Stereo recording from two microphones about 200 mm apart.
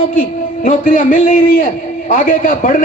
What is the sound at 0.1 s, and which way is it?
A man's voice, 40° left (ahead or behind).